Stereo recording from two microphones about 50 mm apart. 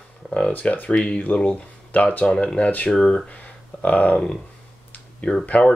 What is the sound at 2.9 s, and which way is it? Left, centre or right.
Speech, centre.